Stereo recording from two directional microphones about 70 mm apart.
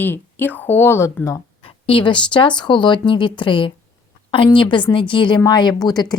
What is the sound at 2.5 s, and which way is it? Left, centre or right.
Speech, left.